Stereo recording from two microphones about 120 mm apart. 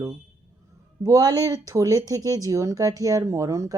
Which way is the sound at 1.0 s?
30° right (ahead or behind).